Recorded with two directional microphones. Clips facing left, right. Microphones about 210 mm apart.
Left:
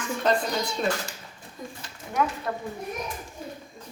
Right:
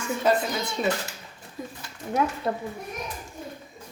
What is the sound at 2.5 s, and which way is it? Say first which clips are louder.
Speech: right 3 dB; 30° right (ahead or behind).